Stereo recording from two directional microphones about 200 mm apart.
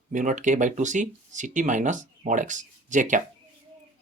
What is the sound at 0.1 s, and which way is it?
Speech, 40° right (ahead or behind).